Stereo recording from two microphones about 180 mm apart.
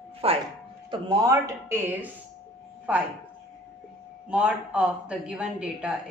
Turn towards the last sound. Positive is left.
turn(degrees=-5)  # may be behind; listen again after turning